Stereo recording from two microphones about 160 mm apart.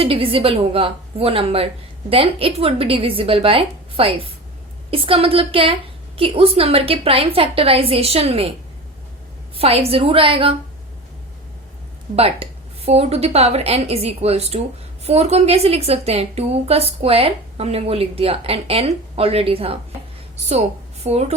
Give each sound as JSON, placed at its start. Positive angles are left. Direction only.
{"t": 0.0, "sound": "a woman's voice", "side_deg": -35}
{"t": 9.6, "sound": "a woman's voice", "side_deg": -40}
{"t": 12.1, "sound": "a woman's voice", "side_deg": -40}